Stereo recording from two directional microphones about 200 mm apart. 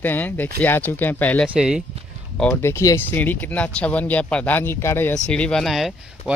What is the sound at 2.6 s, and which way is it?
Speech, 15° left (ahead or behind).